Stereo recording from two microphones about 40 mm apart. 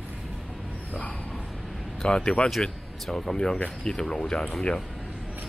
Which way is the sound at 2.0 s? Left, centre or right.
Left.